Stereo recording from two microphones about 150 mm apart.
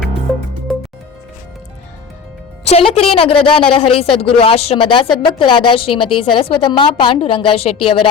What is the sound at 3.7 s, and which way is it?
A woman's voice, 40° left (ahead or behind).